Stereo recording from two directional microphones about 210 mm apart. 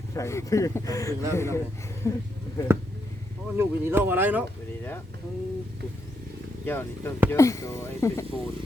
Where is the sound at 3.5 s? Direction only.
10° right (ahead or behind).